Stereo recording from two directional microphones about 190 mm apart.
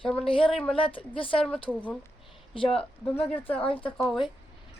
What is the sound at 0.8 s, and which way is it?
Speech, 30° left (ahead or behind).